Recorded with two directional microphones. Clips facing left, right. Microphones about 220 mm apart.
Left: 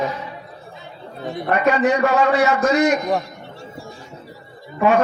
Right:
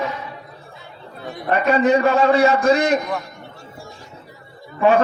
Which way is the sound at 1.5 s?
30° right (ahead or behind).